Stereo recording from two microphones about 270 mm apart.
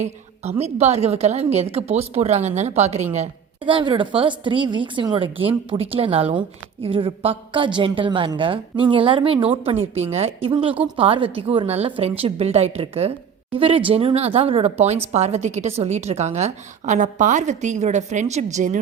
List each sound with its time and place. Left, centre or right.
0.6 s a woman's voice: right